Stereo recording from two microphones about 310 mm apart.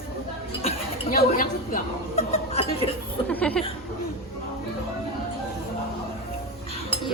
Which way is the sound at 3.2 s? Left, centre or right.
Centre.